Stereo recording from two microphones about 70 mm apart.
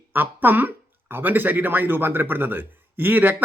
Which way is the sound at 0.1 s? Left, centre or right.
Right.